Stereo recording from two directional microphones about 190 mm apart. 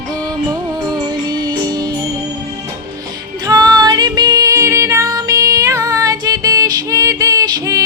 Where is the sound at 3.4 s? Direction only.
20° right (ahead or behind).